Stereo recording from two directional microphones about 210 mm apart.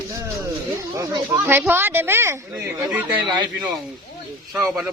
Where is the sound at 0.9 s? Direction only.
15° right (ahead or behind).